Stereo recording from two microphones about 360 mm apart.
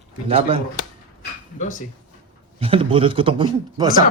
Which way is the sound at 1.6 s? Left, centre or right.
Left.